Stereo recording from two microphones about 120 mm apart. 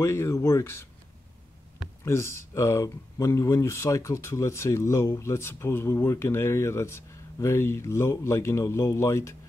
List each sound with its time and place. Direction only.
0.0 s speech: 25° left (ahead or behind)
2.0 s speech: 20° left (ahead or behind)